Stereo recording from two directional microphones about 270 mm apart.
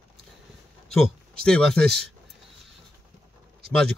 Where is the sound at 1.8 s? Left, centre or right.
Right.